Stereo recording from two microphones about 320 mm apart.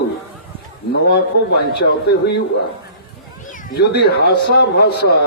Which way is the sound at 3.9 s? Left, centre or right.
Left.